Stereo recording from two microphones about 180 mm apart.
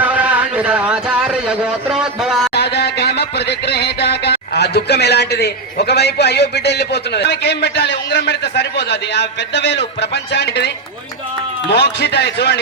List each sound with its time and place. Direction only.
0.0 s speech: 10° right (ahead or behind)
2.6 s music: 65° left (ahead or behind)
11.7 s music: 70° left (ahead or behind)